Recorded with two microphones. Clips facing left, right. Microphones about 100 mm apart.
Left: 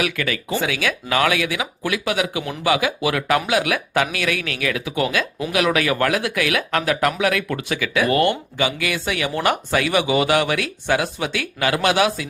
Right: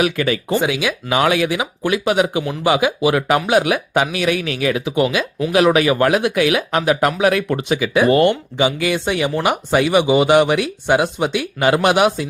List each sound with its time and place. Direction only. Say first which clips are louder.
0.0 s speech: right 6 dB; 25° right (ahead or behind)
9.3 s speech: right 1 dB; 15° right (ahead or behind)